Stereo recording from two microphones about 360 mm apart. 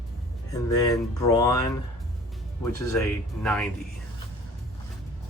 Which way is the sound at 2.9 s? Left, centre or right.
Centre.